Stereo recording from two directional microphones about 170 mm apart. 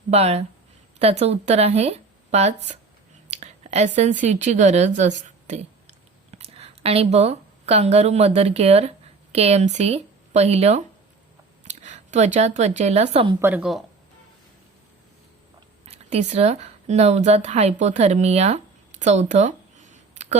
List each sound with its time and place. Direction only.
0.1 s speech: 40° right (ahead or behind)
3.2 s a sound: 40° right (ahead or behind)
4.2 s a woman's voice: 45° right (ahead or behind)
13.4 s a woman's voice: 10° right (ahead or behind)
15.9 s a woman's voice: 40° right (ahead or behind)